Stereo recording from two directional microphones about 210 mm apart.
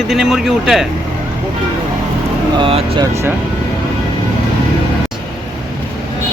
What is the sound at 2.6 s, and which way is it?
Speech, 25° right (ahead or behind).